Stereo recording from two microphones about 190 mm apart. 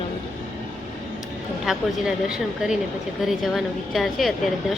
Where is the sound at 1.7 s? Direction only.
Centre (ahead or behind).